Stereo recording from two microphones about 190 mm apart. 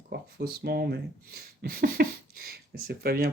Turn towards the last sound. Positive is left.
turn(degrees=-50)  # may be behind; listen again after turning